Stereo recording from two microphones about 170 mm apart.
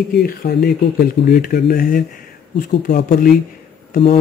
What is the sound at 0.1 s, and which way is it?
Speech, 60° left (ahead or behind).